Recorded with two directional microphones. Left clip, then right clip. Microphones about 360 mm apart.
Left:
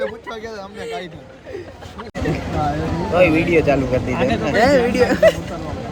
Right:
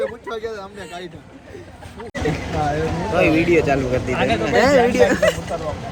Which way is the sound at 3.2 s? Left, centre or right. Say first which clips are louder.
Left 2 dB; centre.